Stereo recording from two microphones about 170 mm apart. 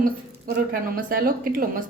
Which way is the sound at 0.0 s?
60° right (ahead or behind).